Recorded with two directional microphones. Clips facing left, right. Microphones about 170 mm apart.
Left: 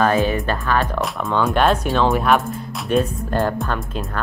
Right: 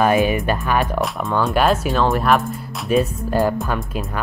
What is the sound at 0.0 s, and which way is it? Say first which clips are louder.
Speech: right 1 dB; 15° right (ahead or behind).